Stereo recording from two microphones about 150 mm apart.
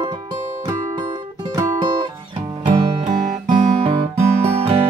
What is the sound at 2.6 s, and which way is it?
Music, 35° right (ahead or behind).